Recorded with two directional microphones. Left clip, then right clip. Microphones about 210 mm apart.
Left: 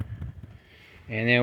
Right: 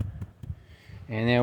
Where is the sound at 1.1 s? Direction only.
15° right (ahead or behind).